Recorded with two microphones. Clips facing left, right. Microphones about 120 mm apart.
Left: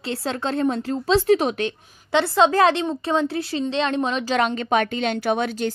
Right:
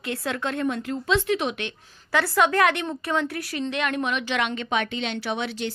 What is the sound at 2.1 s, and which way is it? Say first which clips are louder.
A woman's voice: left 4 dB; 25° left (ahead or behind).